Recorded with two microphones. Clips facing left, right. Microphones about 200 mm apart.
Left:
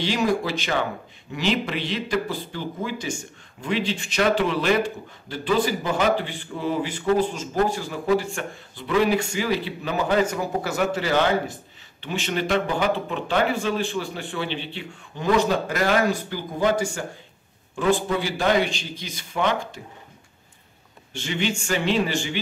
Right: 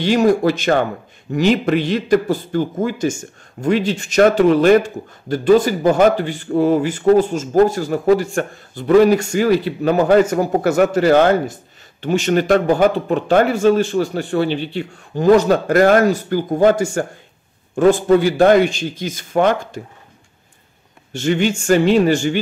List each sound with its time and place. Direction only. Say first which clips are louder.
0.0 s speech: right 9 dB; 50° right (ahead or behind)
21.1 s speech: right 9 dB; 45° right (ahead or behind)